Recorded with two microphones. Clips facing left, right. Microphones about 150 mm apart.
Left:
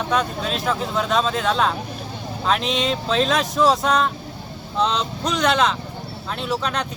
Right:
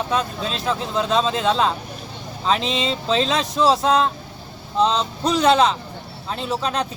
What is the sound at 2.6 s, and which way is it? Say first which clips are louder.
Speech: left 1 dB; 30° right (ahead or behind).